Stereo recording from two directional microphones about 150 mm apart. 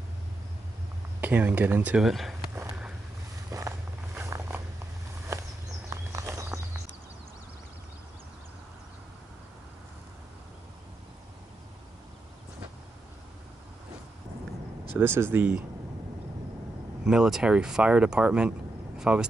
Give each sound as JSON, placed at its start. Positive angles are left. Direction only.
{"t": 1.2, "sound": "speech", "side_deg": -10}
{"t": 3.5, "sound": "walk", "side_deg": -15}
{"t": 5.9, "sound": "a sound", "side_deg": -20}
{"t": 15.0, "sound": "speech", "side_deg": -15}
{"t": 17.0, "sound": "speech", "side_deg": -5}